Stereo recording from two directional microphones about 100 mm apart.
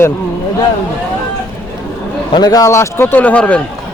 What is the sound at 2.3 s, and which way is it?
A man's voice, 40° left (ahead or behind).